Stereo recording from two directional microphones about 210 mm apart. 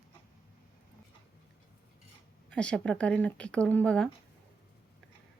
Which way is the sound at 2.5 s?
5° left (ahead or behind).